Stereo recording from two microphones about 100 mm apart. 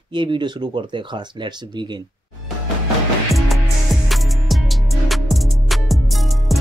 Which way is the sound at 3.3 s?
Centre (ahead or behind).